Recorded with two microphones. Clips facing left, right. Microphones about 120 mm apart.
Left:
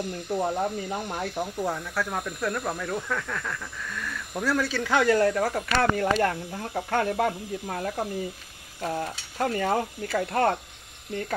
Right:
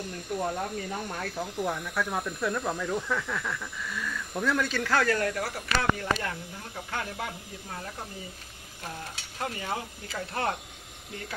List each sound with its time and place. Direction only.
0.3 s speech: 30° left (ahead or behind)
2.0 s speech: centre (ahead or behind); by 5.6 s 45° left (ahead or behind)
5.8 s speech: 55° left (ahead or behind)